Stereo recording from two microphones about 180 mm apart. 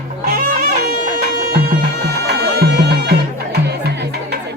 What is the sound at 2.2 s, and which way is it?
Music, 65° right (ahead or behind).